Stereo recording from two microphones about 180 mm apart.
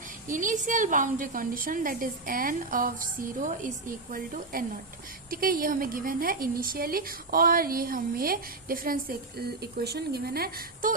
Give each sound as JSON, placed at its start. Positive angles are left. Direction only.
{"t": 0.3, "sound": "a woman's voice", "side_deg": -45}